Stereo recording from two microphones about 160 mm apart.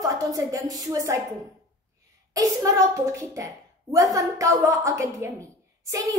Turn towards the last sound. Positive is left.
turn(degrees=-20)  # may be behind; listen again after turning